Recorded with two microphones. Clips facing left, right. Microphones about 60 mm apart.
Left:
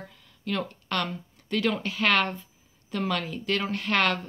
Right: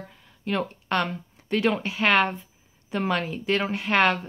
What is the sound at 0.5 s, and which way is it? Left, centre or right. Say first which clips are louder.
Speech: right 4 dB; right.